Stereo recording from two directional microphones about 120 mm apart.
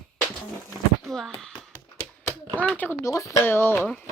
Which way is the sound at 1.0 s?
5° left (ahead or behind).